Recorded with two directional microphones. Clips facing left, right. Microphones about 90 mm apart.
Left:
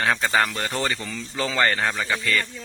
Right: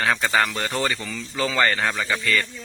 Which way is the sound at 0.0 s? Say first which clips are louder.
Even; 20° left (ahead or behind).